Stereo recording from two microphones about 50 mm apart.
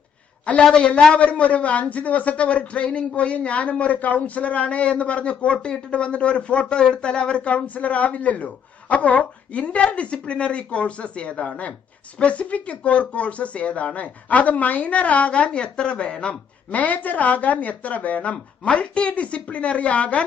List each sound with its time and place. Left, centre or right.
0.6 s a man's voice: centre